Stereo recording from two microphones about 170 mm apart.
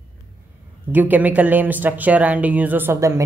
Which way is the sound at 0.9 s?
10° right (ahead or behind).